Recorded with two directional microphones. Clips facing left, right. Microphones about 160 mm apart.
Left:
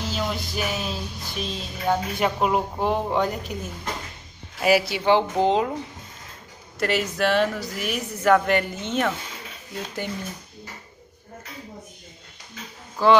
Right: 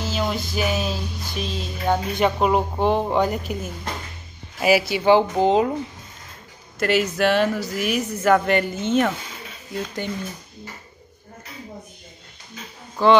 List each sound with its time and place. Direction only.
0.0 s music: centre (ahead or behind)
4.6 s music: centre (ahead or behind)
6.8 s music: centre (ahead or behind)
12.9 s speech: 5° left (ahead or behind)